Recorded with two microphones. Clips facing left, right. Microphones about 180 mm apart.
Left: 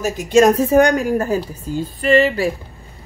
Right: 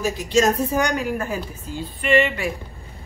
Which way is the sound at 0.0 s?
50° left (ahead or behind).